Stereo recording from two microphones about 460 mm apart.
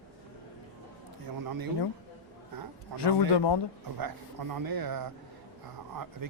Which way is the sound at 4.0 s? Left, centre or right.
Right.